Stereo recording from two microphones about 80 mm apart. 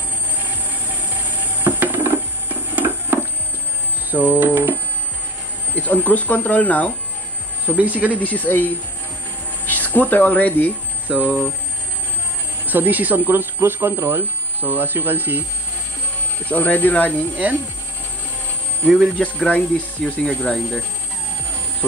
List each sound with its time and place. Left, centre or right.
1.6 s music: right
2.7 s a sound: right
4.1 s speech: right
5.8 s speech: left
7.6 s speech: centre
8.2 s speech: centre
11.1 s speech: centre
12.6 s speech: right
16.4 s speech: centre
17.4 s speech: right
19.1 s speech: centre